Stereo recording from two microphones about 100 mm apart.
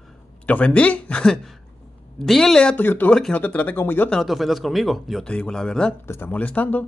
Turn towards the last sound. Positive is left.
turn(degrees=15)  # may be behind; listen again after turning